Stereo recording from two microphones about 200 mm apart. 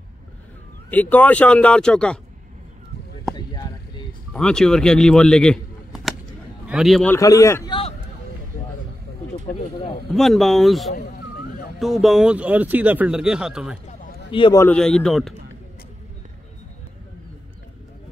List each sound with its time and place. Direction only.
0.8 s speech: 10° left (ahead or behind)
4.3 s speech: 5° left (ahead or behind)
7.2 s speech: 15° left (ahead or behind)
9.5 s speech: 25° left (ahead or behind)
10.1 s speech: centre (ahead or behind)
11.1 s a sound: 50° left (ahead or behind)
11.8 s speech: centre (ahead or behind)
13.8 s a sound: 40° left (ahead or behind)
14.3 s speech: 25° left (ahead or behind)
14.6 s speech: 5° left (ahead or behind)